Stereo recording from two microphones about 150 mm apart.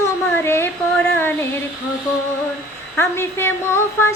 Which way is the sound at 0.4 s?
15° left (ahead or behind).